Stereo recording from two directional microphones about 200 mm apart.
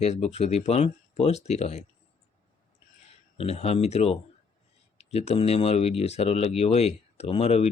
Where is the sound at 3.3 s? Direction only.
30° left (ahead or behind).